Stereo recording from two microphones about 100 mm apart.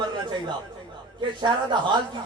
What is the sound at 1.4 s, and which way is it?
Speech, 50° right (ahead or behind).